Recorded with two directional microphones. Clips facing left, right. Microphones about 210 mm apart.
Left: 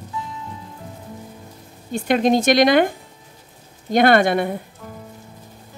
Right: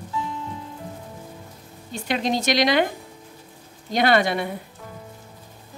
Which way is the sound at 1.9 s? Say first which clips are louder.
Left 7 dB; 50° left (ahead or behind).